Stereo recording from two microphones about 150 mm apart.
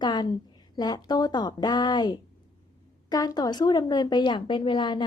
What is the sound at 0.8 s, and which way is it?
Speech, 30° left (ahead or behind).